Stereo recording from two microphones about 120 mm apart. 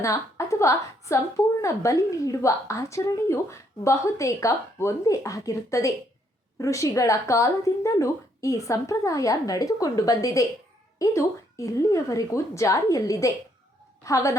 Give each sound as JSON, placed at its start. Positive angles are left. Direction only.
{"t": 0.0, "sound": "a woman's voice", "side_deg": 25}